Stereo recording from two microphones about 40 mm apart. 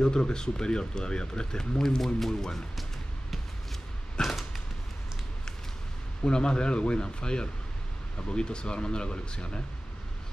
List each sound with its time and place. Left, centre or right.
0.0 s speech: left
4.2 s a sound: centre
6.2 s speech: left